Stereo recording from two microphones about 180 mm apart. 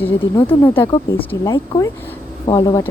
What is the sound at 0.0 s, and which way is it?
Speech, 15° left (ahead or behind).